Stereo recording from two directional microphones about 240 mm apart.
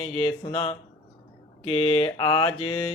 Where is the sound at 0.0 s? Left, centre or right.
Left.